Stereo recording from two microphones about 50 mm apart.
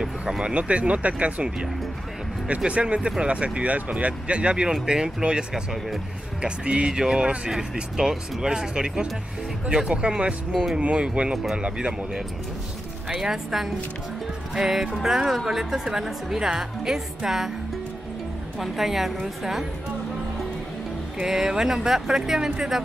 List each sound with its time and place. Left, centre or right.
0.0 s speech: centre
6.4 s speech: right
10.5 s a woman's voice: centre
10.8 s speech: right
13.1 s speech: centre
18.6 s a woman's voice: centre
21.2 s speech: centre